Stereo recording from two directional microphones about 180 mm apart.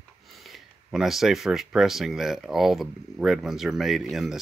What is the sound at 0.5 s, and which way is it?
Speech, centre (ahead or behind).